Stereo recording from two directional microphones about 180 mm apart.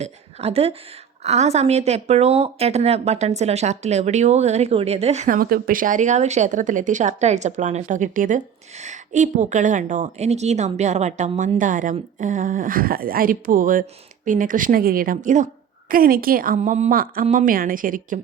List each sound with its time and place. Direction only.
0.0 s a woman's voice: 35° right (ahead or behind)